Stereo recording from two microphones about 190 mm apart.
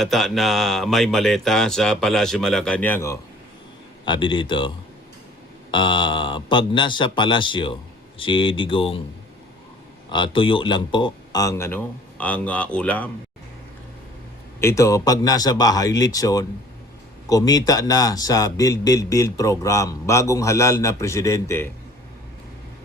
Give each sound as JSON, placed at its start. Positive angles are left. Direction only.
{"t": 0.0, "sound": "speech", "side_deg": 0}
{"t": 4.0, "sound": "a man's voice", "side_deg": 25}
{"t": 5.7, "sound": "a man's voice", "side_deg": 25}
{"t": 10.1, "sound": "speech", "side_deg": 25}
{"t": 14.6, "sound": "a man's voice", "side_deg": 15}